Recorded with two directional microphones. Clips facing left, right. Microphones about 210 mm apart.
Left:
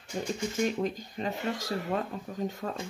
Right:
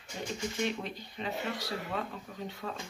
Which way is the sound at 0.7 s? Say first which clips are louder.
Left 6 dB; 45° left (ahead or behind).